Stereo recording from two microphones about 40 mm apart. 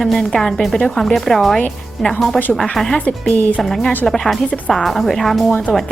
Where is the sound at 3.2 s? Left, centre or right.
Left.